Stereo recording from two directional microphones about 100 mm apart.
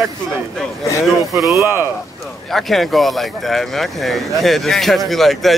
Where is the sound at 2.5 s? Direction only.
Centre (ahead or behind).